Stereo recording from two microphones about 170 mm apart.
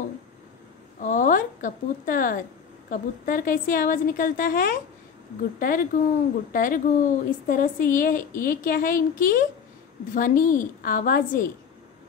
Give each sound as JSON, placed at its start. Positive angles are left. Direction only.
{"t": 1.0, "sound": "speech", "side_deg": 50}